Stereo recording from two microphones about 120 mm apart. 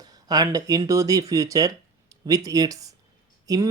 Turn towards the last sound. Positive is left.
turn(degrees=-30)  # may be behind; listen again after turning